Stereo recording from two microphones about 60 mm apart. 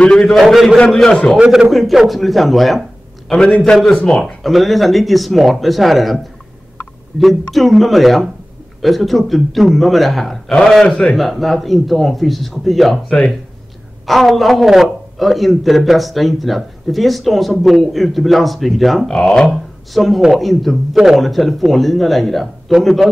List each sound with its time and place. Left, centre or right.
0.0 s speech: centre
0.3 s a man's voice: centre
1.4 s a man's voice: centre
1.7 s a man's voice: centre
3.3 s a man's voice: centre
14.0 s a man's voice: centre